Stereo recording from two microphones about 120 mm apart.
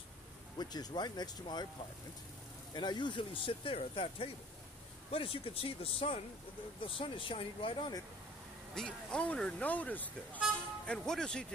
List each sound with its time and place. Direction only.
0.6 s speech: 35° left (ahead or behind)
2.7 s speech: 35° left (ahead or behind)
8.7 s speech: 5° left (ahead or behind)